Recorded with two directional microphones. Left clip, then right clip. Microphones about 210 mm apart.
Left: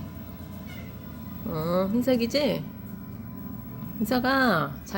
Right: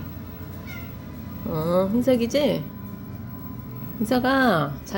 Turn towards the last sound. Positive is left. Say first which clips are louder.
# right 3 dB
turn(degrees=-10)  # may be behind; listen again after turning